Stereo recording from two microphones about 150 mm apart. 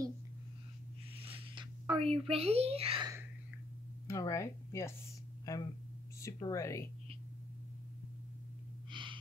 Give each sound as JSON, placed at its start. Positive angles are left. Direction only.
{"t": 1.2, "sound": "a sound", "side_deg": -35}
{"t": 2.0, "sound": "a woman's voice", "side_deg": -40}
{"t": 4.1, "sound": "speech", "side_deg": 20}
{"t": 8.9, "sound": "gasp", "side_deg": -35}